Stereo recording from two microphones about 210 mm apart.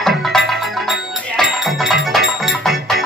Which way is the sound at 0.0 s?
Centre (ahead or behind).